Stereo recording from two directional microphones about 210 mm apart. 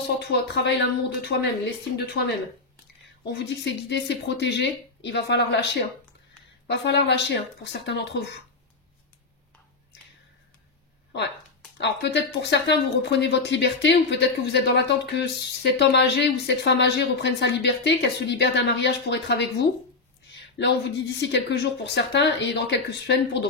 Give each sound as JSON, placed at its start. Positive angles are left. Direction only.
{"t": 0.2, "sound": "speech", "side_deg": 50}
{"t": 3.3, "sound": "speech", "side_deg": 55}
{"t": 11.8, "sound": "speech", "side_deg": 55}
{"t": 20.5, "sound": "speech", "side_deg": 55}